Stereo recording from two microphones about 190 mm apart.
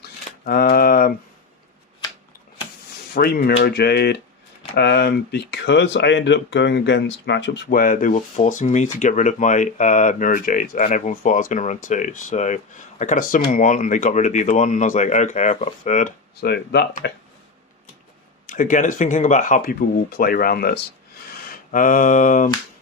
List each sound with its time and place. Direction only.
0.3 s speech: 55° left (ahead or behind)
3.2 s speech: 55° left (ahead or behind)
16.4 s speech: 60° left (ahead or behind)
18.4 s speech: 45° left (ahead or behind)